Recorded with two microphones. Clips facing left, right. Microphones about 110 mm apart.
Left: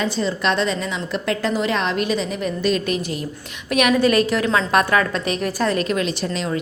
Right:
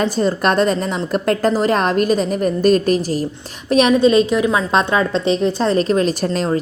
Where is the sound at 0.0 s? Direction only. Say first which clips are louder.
Right 5 dB; 45° right (ahead or behind).